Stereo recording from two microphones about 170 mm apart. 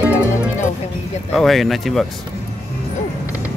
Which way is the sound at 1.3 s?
Centre (ahead or behind).